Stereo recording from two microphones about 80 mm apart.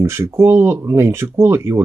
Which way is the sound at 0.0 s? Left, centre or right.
Right.